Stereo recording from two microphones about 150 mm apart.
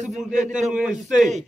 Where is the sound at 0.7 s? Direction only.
5° right (ahead or behind).